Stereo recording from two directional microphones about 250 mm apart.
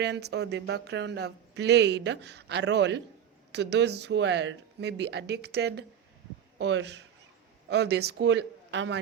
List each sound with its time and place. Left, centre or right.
0.0 s speech: right